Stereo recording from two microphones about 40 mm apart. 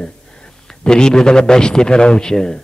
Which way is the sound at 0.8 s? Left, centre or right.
Centre.